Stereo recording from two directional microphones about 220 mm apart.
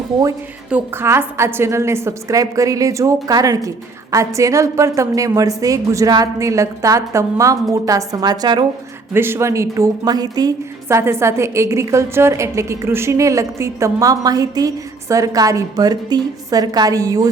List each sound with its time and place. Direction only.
0.2 s a woman's voice: 15° right (ahead or behind)